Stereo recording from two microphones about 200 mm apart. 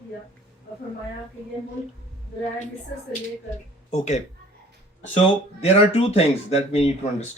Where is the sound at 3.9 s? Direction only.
35° left (ahead or behind).